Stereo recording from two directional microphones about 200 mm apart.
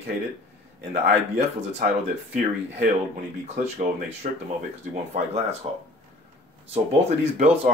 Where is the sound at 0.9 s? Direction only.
35° right (ahead or behind).